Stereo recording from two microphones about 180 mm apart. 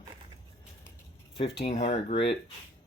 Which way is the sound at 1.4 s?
35° left (ahead or behind).